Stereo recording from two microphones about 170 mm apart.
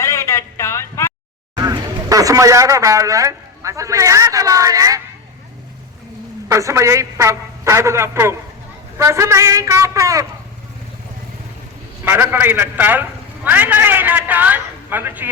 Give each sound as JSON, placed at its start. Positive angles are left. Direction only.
{"t": 0.0, "sound": "a sound", "side_deg": 15}
{"t": 1.5, "sound": "a man's voice", "side_deg": -20}
{"t": 6.5, "sound": "a man's voice", "side_deg": -20}
{"t": 12.0, "sound": "a man's voice", "side_deg": -10}